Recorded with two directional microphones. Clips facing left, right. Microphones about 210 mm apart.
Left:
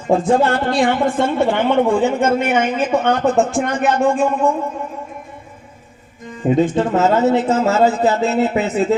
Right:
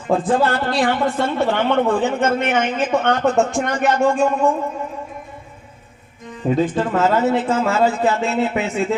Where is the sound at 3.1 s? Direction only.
Centre (ahead or behind).